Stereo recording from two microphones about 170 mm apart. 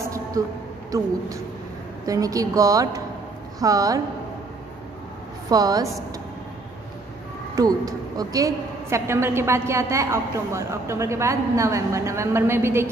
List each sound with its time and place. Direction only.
0.0 s a sound: 20° right (ahead or behind)
0.9 s a woman's voice: 20° right (ahead or behind)
5.5 s a woman's voice: 20° right (ahead or behind)
7.5 s a woman's voice: 20° right (ahead or behind)